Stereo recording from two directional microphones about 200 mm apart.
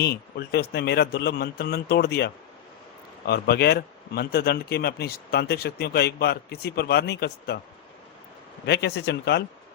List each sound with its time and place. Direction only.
0.0 s speech: 50° left (ahead or behind)
8.6 s speech: 55° left (ahead or behind)